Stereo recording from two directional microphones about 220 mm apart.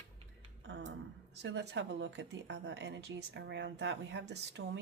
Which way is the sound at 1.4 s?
50° right (ahead or behind).